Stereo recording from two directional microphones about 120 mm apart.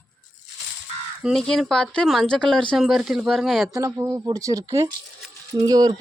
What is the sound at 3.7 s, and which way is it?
Speech, 30° right (ahead or behind).